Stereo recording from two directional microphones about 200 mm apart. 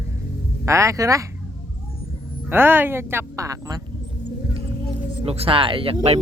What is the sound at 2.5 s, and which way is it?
Speech, 10° right (ahead or behind).